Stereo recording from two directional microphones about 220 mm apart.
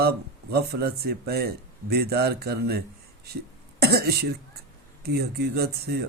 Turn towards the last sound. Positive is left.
turn(degrees=-45)  # may be behind; listen again after turning